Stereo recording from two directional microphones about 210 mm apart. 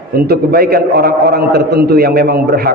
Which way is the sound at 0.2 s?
45° right (ahead or behind).